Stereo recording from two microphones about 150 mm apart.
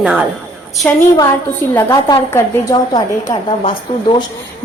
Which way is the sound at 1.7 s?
20° left (ahead or behind).